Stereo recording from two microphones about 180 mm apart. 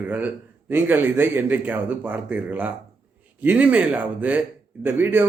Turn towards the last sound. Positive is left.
turn(degrees=-10)  # may be behind; listen again after turning